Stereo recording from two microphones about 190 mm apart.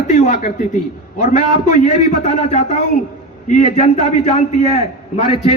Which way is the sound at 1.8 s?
35° left (ahead or behind).